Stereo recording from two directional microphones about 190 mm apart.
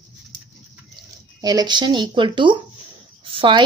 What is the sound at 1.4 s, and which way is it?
A woman's voice, 20° right (ahead or behind).